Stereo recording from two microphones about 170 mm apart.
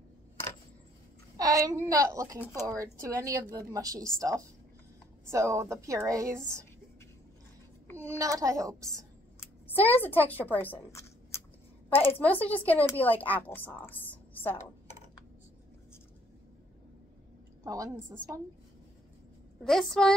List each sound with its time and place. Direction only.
1.3 s a woman's voice: 20° right (ahead or behind)
5.3 s a woman's voice: 15° right (ahead or behind)
7.9 s a sound: 10° left (ahead or behind)
8.2 s a woman's voice: 20° right (ahead or behind)
9.4 s speech: 10° left (ahead or behind)
17.6 s a woman's voice: 20° right (ahead or behind)
19.6 s a woman's voice: centre (ahead or behind)